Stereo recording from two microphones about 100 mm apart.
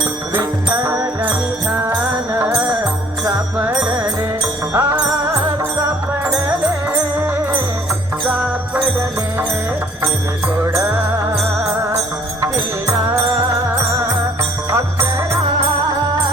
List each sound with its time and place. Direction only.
1.2 s jingle bell: 20° right (ahead or behind)
2.4 s music: 15° right (ahead or behind)
4.7 s music: 30° right (ahead or behind)
10.7 s music: 25° right (ahead or behind)